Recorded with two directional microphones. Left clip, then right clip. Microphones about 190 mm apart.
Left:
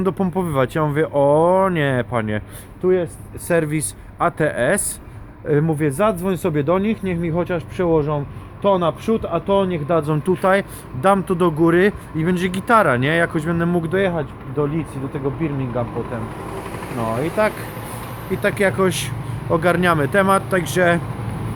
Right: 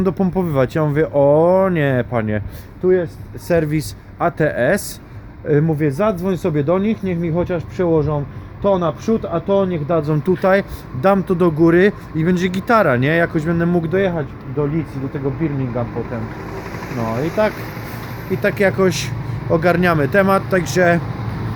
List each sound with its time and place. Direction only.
0.0 s speech: 5° right (ahead or behind)
16.1 s speech: 10° left (ahead or behind)
18.4 s speech: 5° right (ahead or behind)